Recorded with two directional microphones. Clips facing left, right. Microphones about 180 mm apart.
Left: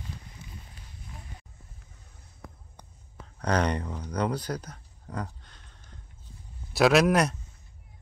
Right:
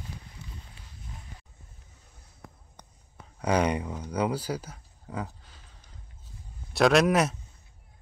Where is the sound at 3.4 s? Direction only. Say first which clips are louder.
Right 1 dB; 10° right (ahead or behind).